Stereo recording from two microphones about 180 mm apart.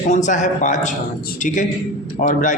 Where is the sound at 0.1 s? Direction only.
40° left (ahead or behind).